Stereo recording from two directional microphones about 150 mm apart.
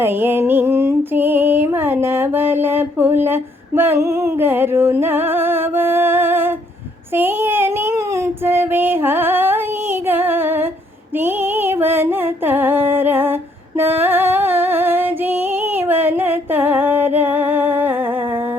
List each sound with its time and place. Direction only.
0.0 s music: 15° right (ahead or behind)
7.2 s child singing: 15° right (ahead or behind)
10.1 s music: 15° right (ahead or behind)
17.2 s humming: 15° right (ahead or behind)